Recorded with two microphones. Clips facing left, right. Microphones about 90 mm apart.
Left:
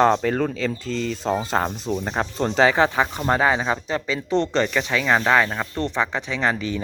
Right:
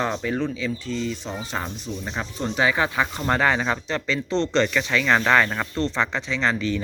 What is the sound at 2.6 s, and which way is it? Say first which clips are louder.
Speech: left 4 dB; 30° left (ahead or behind).